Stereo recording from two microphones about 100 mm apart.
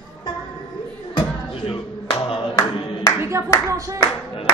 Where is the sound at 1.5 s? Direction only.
55° left (ahead or behind).